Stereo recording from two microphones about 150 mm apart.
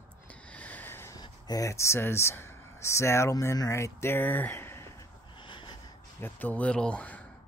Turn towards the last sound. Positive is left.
turn(degrees=10)  # may be behind; listen again after turning